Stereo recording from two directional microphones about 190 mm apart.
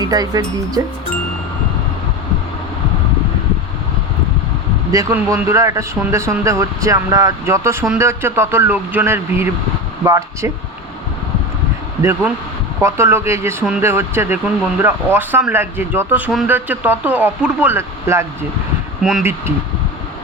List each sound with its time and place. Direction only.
0.0 s speech: 20° right (ahead or behind)
4.9 s speech: 15° right (ahead or behind)
12.8 s speech: 15° right (ahead or behind)